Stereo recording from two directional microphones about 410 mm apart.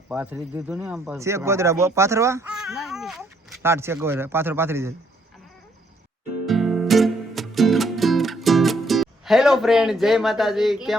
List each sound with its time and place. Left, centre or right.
0.1 s speech: centre
6.4 s music: centre